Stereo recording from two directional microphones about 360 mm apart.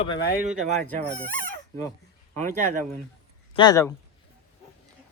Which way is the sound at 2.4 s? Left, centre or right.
Right.